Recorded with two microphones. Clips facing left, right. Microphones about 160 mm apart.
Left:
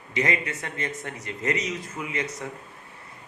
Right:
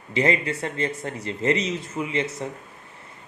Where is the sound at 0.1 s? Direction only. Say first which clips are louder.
Right 4 dB; 30° right (ahead or behind).